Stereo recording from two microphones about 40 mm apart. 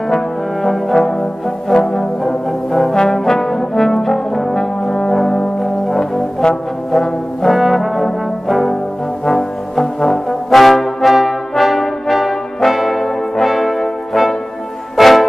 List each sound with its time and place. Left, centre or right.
0.6 s brass instrument: centre
1.7 s music: centre
2.7 s brass instrument: centre
5.1 s music: centre
6.4 s brass instrument: centre
6.9 s brass instrument: centre
7.5 s brass instrument: centre
15.0 s music: centre